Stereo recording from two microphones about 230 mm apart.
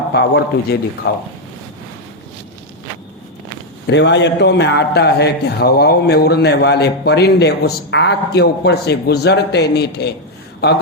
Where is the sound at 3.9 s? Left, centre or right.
Left.